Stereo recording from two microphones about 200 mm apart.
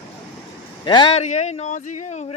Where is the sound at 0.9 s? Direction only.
25° left (ahead or behind).